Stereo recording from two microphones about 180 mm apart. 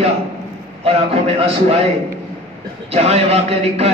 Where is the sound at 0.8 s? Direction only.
35° right (ahead or behind).